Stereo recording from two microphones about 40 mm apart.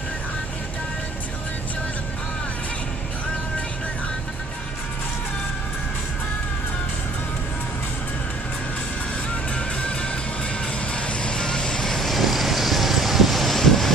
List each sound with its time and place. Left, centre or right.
9.6 s music: left
10.9 s vehicle: left; by 12.2 s centre
12.2 s vehicle: centre